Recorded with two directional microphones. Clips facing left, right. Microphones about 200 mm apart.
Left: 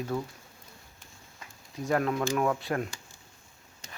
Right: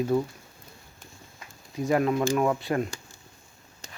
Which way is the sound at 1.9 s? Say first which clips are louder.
Right 4 dB; 5° right (ahead or behind).